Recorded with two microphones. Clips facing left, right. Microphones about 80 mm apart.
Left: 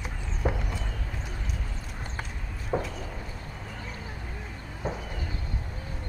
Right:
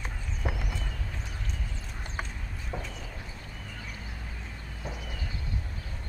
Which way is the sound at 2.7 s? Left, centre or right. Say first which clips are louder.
Left 9 dB; left.